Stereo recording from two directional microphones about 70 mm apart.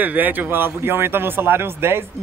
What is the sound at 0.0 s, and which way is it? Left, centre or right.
Speech, right.